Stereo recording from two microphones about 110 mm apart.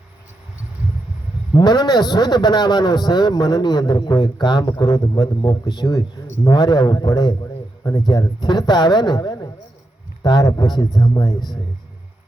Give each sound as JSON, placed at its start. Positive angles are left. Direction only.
{"t": 1.5, "sound": "a man's voice", "side_deg": 40}